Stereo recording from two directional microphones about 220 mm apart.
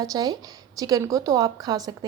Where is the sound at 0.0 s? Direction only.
15° right (ahead or behind).